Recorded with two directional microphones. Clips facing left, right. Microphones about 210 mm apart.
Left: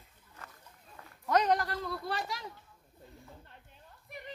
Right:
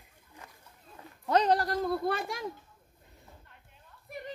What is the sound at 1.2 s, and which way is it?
Speech, 30° right (ahead or behind).